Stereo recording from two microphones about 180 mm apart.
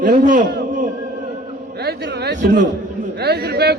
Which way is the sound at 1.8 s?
65° right (ahead or behind).